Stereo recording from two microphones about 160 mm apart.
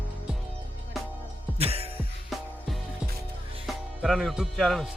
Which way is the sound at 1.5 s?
40° right (ahead or behind).